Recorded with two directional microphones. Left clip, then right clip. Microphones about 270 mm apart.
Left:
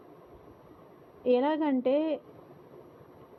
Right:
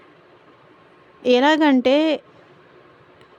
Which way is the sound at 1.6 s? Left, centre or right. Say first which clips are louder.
Right 11 dB; right.